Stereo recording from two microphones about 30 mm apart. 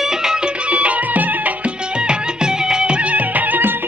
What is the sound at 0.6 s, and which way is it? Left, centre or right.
Music, right.